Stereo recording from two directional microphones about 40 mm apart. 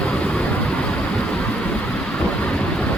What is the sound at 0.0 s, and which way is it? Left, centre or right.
Vehicle, left.